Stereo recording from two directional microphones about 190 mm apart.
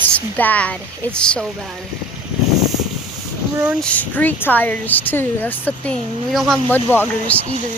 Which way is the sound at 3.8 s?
10° left (ahead or behind).